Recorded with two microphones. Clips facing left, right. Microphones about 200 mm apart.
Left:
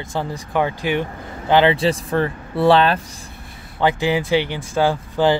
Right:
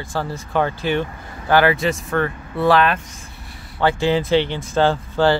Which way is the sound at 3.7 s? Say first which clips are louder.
Right 1 dB; 15° left (ahead or behind).